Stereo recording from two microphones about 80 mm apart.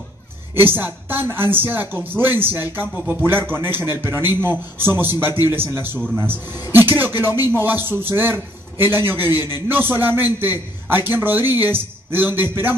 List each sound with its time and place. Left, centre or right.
0.6 s a woman's voice: right